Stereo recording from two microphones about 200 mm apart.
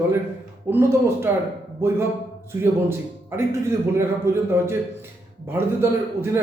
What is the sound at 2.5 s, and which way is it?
A man's voice, 15° right (ahead or behind).